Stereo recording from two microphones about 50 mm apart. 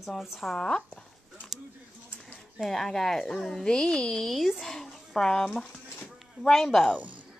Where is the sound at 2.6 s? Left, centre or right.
Centre.